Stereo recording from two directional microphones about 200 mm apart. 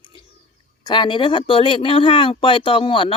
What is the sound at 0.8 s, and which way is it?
Speech, 25° left (ahead or behind).